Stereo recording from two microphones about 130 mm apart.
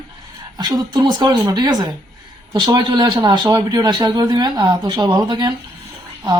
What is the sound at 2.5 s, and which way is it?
A man's voice, 35° right (ahead or behind).